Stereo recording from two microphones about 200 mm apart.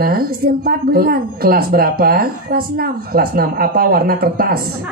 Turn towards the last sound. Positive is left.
turn(degrees=-50)  # may be behind; listen again after turning